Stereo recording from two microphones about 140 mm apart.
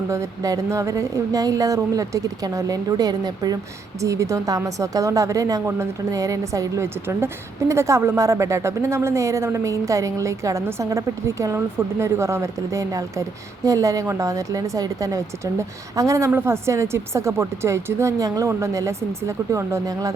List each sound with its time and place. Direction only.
0.1 s speech: 25° right (ahead or behind)